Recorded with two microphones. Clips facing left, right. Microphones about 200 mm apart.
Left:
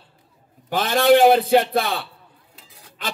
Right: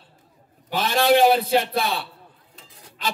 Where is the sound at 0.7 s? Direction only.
55° left (ahead or behind).